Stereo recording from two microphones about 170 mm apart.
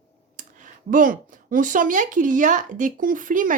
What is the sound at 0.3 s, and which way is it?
Speech, 50° right (ahead or behind).